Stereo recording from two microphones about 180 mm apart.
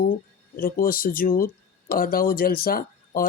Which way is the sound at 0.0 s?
50° left (ahead or behind).